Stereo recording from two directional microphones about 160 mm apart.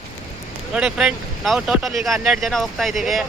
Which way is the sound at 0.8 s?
5° right (ahead or behind).